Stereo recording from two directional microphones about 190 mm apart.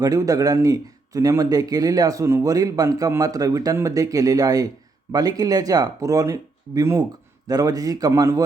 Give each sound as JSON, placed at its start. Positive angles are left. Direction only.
{"t": 0.0, "sound": "speech", "side_deg": -20}